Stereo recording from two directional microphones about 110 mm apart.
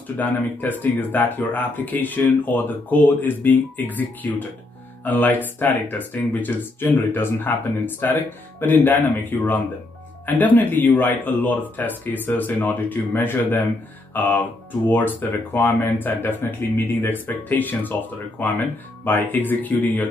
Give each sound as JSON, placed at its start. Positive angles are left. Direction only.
{"t": 0.2, "sound": "speech", "side_deg": 15}
{"t": 19.0, "sound": "speech", "side_deg": 15}